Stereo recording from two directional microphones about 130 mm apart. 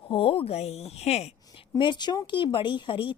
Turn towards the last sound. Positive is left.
turn(degrees=40)  # may be behind; listen again after turning